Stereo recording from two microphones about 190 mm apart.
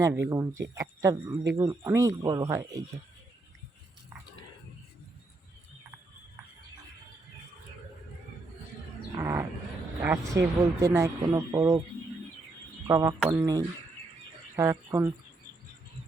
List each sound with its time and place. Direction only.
0.3 s speech: 15° right (ahead or behind)
9.1 s bird: 15° right (ahead or behind)
10.0 s speech: 15° right (ahead or behind)
12.9 s speech: 15° right (ahead or behind)